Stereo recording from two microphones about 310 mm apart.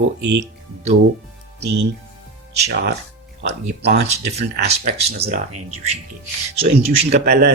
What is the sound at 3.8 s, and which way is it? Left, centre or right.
Speech, right.